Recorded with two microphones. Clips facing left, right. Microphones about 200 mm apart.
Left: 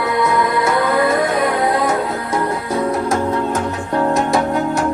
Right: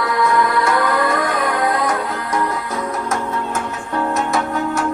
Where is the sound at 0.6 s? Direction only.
25° left (ahead or behind).